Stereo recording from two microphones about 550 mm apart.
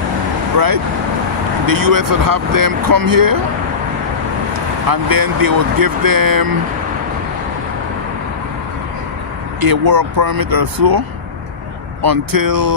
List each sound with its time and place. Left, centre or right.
1.7 s speech: right
4.8 s speech: right
9.6 s speech: right